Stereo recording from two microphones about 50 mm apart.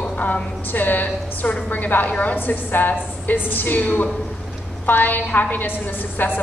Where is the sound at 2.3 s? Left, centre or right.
Left.